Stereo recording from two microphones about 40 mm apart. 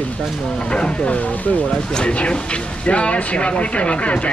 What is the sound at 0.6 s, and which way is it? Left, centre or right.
Speech, left.